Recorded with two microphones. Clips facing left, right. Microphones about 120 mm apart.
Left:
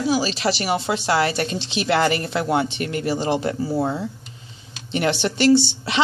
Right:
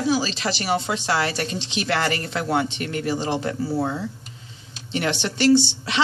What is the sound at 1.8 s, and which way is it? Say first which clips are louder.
A woman's voice: left 5 dB; 20° left (ahead or behind).